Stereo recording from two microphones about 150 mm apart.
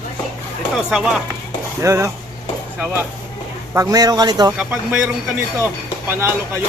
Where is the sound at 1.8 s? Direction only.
20° right (ahead or behind).